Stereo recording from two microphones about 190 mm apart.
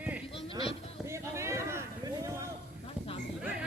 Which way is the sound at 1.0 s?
15° right (ahead or behind).